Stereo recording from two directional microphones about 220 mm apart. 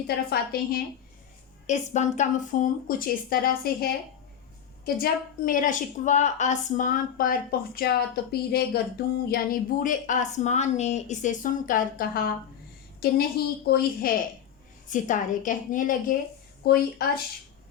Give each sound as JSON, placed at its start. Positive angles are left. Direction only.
{"t": 0.3, "sound": "a woman's voice", "side_deg": 45}
{"t": 1.6, "sound": "a woman's voice", "side_deg": 30}
{"t": 4.9, "sound": "a woman's voice", "side_deg": 40}